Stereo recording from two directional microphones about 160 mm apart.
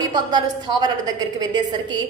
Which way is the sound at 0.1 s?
25° right (ahead or behind).